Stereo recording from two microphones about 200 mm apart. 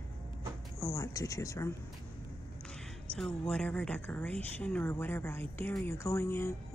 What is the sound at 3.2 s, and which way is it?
A woman's voice, 5° left (ahead or behind).